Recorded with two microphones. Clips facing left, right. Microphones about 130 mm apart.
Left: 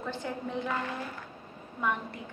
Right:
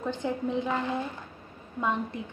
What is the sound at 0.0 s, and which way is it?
Speech, 20° right (ahead or behind).